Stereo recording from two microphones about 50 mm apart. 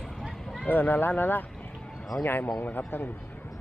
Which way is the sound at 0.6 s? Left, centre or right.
Left.